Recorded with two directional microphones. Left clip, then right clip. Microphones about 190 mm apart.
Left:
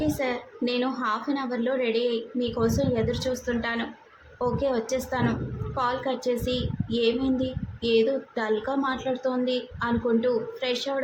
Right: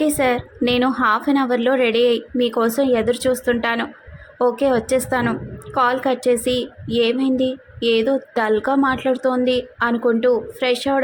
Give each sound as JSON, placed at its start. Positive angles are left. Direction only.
{"t": 0.0, "sound": "a woman's voice", "side_deg": -35}